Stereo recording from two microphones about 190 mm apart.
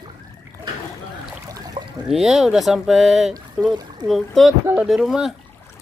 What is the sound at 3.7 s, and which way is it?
Speech, 20° right (ahead or behind).